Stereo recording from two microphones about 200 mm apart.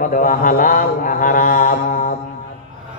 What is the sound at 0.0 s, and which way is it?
Mantra, 45° left (ahead or behind).